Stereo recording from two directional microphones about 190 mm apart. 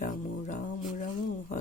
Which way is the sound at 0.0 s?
40° left (ahead or behind).